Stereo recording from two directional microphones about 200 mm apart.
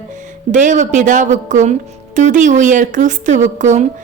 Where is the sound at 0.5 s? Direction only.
40° right (ahead or behind).